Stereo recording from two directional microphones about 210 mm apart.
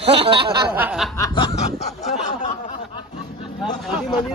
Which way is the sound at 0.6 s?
5° right (ahead or behind).